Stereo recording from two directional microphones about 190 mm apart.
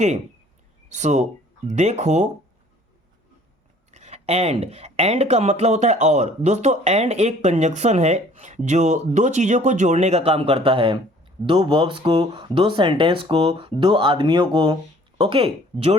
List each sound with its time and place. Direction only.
0.9 s speech: 40° right (ahead or behind)
3.9 s speech: 35° right (ahead or behind)